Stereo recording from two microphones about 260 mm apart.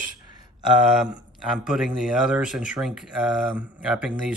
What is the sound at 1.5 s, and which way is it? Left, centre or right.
Speech, centre.